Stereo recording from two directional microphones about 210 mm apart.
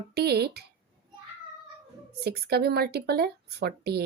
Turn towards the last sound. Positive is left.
turn(degrees=-50)  # may be behind; listen again after turning